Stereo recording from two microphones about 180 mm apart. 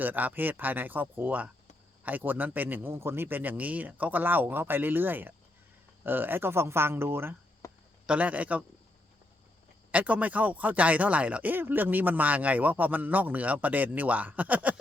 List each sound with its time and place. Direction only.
0.0 s speech: 10° right (ahead or behind)
7.6 s a sound: 15° left (ahead or behind)
8.0 s speech: 5° right (ahead or behind)
9.9 s speech: 10° right (ahead or behind)